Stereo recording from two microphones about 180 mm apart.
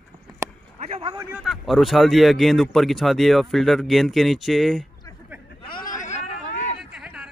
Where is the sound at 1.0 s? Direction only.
25° right (ahead or behind).